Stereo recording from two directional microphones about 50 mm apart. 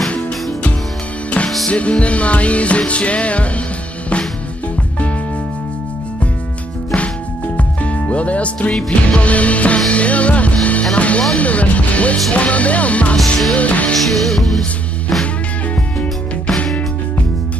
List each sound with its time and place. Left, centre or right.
1.7 s speech: left
7.5 s music: left
8.7 s speech: left
9.9 s music: left
11.3 s speech: left
13.9 s music: centre
16.4 s music: centre